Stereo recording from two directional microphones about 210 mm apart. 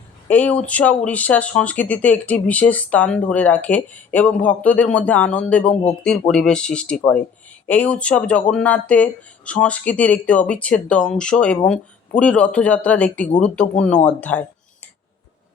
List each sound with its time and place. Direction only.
0.3 s speech: 5° left (ahead or behind)